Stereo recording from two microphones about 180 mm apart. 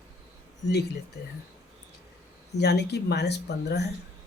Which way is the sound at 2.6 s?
65° left (ahead or behind).